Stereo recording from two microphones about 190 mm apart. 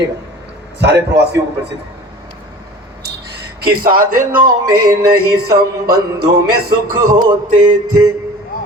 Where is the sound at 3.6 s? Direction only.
50° right (ahead or behind).